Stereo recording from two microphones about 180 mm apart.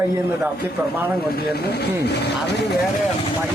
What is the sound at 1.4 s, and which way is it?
Speech, 60° left (ahead or behind).